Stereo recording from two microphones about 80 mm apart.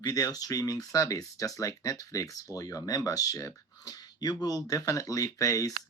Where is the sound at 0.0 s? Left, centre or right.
Left.